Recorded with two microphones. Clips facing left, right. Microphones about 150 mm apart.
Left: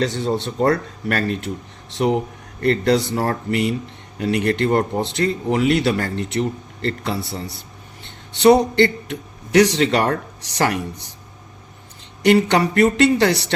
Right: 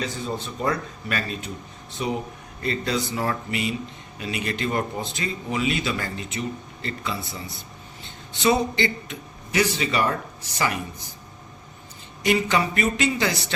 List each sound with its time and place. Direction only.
0.0 s a man's voice: 75° left (ahead or behind)
12.2 s speech: 70° left (ahead or behind)